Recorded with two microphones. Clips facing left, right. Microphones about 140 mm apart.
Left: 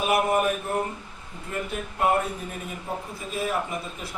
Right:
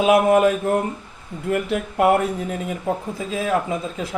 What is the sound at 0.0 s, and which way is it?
Speech, 90° right.